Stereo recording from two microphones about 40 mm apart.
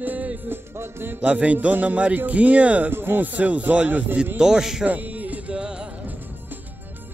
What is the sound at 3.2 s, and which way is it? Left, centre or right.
Speech, right.